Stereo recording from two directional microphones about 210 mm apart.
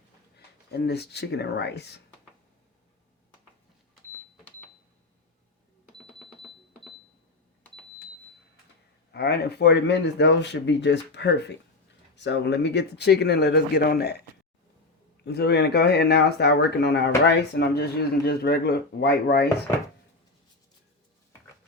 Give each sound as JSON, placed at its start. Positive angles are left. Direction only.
{"t": 0.3, "sound": "speech", "side_deg": 50}
{"t": 6.1, "sound": "a sound", "side_deg": 0}
{"t": 9.1, "sound": "speech", "side_deg": 50}
{"t": 15.2, "sound": "speech", "side_deg": 50}